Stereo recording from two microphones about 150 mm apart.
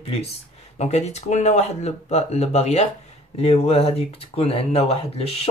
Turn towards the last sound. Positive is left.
turn(degrees=40)  # may be behind; listen again after turning